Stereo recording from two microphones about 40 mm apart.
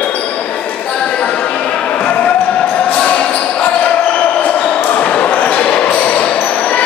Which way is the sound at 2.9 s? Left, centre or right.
Left.